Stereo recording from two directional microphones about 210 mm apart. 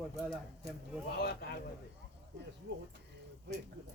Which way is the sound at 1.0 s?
50° left (ahead or behind).